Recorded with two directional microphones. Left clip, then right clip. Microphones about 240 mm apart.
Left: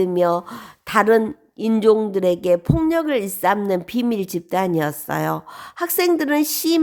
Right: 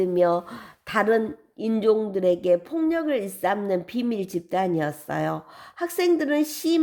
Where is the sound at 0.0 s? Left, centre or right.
Left.